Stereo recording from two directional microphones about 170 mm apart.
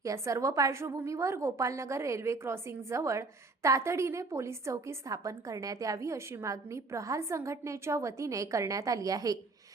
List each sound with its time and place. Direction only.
0.0 s a woman's voice: 20° right (ahead or behind)